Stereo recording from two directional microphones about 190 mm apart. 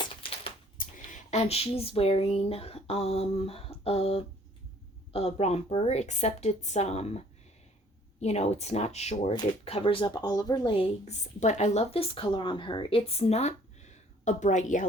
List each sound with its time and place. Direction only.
0.0 s a sound: 30° left (ahead or behind)
0.8 s speech: 40° left (ahead or behind)
8.2 s speech: 35° left (ahead or behind)